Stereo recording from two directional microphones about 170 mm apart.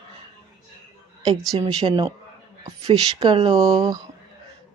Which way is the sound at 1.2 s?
25° right (ahead or behind).